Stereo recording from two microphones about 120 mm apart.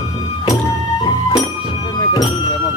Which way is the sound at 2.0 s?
35° left (ahead or behind).